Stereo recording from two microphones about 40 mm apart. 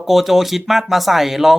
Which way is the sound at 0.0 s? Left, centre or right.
Centre.